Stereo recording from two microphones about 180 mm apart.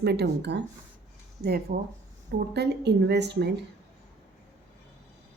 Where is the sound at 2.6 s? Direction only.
70° right (ahead or behind).